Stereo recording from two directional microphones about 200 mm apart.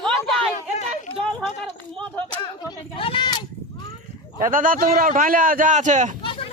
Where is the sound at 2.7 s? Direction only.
25° left (ahead or behind).